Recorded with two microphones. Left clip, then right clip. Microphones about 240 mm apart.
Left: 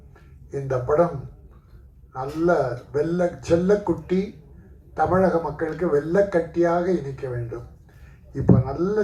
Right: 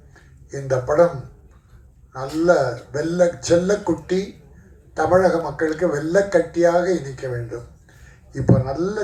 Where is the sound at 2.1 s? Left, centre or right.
Right.